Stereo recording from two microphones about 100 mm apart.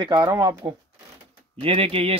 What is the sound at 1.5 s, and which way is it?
Speech, 75° right (ahead or behind).